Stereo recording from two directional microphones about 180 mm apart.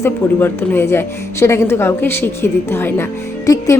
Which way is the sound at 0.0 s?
10° left (ahead or behind).